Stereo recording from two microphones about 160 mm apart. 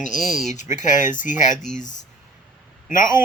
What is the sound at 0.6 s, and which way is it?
Speech, 50° left (ahead or behind).